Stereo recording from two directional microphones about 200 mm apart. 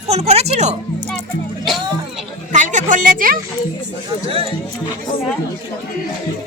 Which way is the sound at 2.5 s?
40° right (ahead or behind).